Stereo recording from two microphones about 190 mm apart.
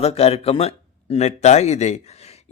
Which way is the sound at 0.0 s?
30° left (ahead or behind).